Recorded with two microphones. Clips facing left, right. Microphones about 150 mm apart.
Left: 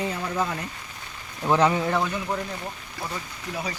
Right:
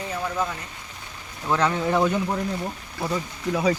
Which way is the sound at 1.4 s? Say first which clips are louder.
Left 2 dB; 15° left (ahead or behind).